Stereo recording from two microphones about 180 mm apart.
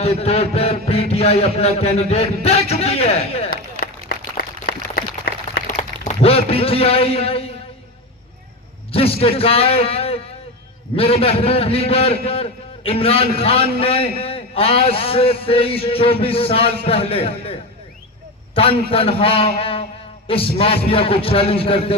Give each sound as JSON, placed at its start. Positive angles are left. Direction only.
{"t": 0.0, "sound": "a man's voice", "side_deg": 35}
{"t": 3.5, "sound": "a sound", "side_deg": 55}
{"t": 5.7, "sound": "a man's voice", "side_deg": 35}
{"t": 8.9, "sound": "a man's voice", "side_deg": 30}